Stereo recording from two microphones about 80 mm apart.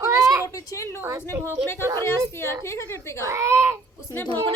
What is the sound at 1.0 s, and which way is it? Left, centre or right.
Speech, right.